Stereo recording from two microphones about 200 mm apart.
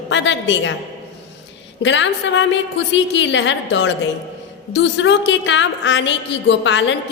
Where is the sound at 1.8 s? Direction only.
65° left (ahead or behind).